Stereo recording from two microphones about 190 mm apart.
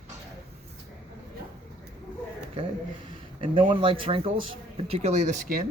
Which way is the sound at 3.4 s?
25° right (ahead or behind).